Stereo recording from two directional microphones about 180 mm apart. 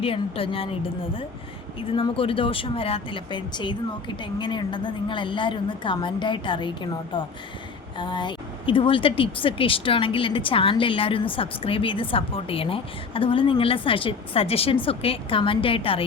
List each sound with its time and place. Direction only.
0.0 s a woman's voice: 30° left (ahead or behind)